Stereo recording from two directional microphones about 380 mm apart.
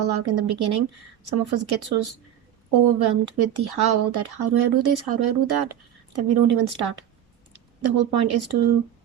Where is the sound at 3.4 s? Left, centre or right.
Right.